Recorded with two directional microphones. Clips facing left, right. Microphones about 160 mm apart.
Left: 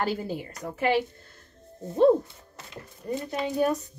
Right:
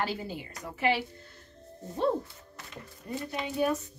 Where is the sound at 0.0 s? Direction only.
45° left (ahead or behind).